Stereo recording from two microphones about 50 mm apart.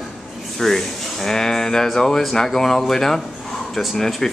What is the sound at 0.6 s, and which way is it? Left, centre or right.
Speech, centre.